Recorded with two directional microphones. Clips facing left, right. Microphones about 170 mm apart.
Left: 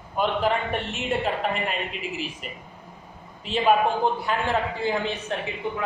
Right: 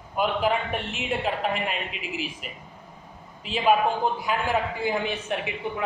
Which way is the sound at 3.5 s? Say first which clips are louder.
Left 1 dB; 5° right (ahead or behind).